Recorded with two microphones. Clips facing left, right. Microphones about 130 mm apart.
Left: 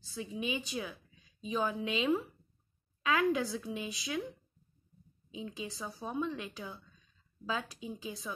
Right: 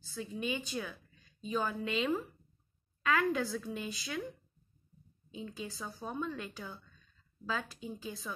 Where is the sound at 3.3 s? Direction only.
5° left (ahead or behind).